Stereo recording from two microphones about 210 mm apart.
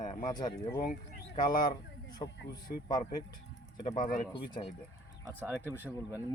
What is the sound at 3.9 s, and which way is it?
Speech, 40° left (ahead or behind).